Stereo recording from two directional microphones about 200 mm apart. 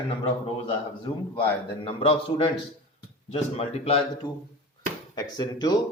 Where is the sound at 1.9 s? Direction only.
25° left (ahead or behind).